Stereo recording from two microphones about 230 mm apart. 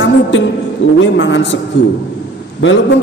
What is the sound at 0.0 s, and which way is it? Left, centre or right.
A woman's voice, left.